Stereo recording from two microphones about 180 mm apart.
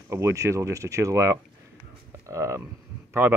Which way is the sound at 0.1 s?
15° right (ahead or behind).